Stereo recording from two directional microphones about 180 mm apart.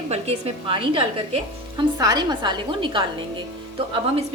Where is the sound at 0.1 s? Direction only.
35° right (ahead or behind).